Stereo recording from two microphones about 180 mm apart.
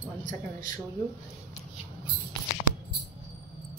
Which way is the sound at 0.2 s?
45° right (ahead or behind).